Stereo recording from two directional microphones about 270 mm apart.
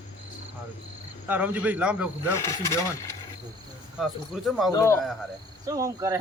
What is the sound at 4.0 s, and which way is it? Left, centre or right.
Speech, centre.